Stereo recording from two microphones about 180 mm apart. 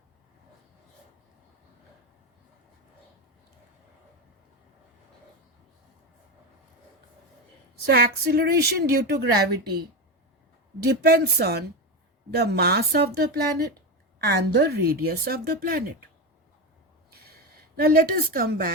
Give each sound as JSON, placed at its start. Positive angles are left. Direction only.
{"t": 7.9, "sound": "a woman's voice", "side_deg": -60}
{"t": 10.8, "sound": "a woman's voice", "side_deg": -60}
{"t": 17.1, "sound": "a sound", "side_deg": -60}